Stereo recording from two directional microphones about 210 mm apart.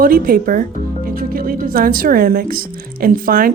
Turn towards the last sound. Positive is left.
turn(degrees=-45)  # may be behind; listen again after turning